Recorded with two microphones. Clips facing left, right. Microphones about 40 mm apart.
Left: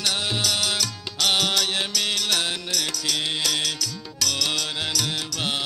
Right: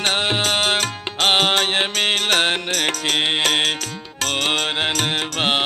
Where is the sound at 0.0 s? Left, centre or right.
Right.